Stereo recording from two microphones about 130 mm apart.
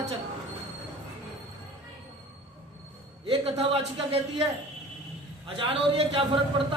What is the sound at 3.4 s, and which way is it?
A man's voice, 50° right (ahead or behind).